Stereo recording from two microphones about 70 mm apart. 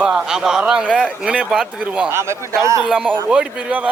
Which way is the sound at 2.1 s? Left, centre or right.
Right.